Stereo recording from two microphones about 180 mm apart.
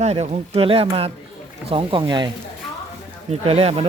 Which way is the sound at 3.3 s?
35° right (ahead or behind).